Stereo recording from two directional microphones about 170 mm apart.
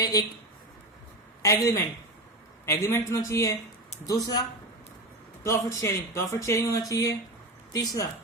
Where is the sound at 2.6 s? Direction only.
15° left (ahead or behind).